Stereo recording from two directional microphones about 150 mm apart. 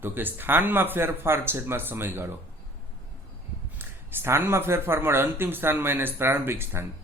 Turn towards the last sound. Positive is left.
turn(degrees=-15)  # may be behind; listen again after turning